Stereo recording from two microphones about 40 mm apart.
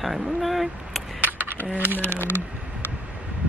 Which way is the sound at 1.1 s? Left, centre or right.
Right.